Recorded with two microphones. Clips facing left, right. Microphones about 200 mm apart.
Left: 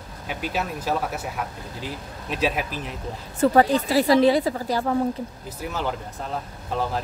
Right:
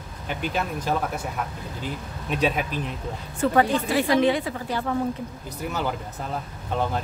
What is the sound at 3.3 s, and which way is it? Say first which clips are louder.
A woman's voice: left 3 dB; 35° left (ahead or behind).